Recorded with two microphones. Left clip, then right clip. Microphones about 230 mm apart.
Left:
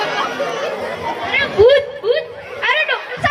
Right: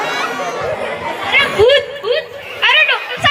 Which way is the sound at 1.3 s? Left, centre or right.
Left.